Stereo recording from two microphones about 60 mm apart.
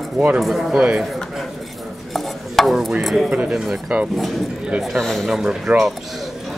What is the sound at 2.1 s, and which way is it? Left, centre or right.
Chopping, centre.